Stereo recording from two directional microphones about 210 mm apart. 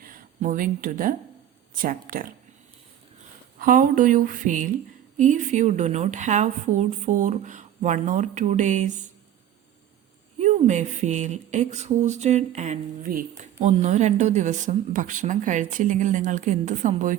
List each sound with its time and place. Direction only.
0.0 s speech: 40° right (ahead or behind)
3.6 s speech: 40° right (ahead or behind)
10.3 s speech: 35° right (ahead or behind)